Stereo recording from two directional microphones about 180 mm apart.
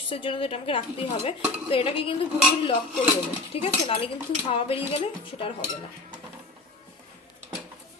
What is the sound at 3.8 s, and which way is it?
Speech, 30° left (ahead or behind).